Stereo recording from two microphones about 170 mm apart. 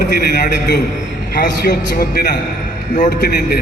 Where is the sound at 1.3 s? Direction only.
70° left (ahead or behind).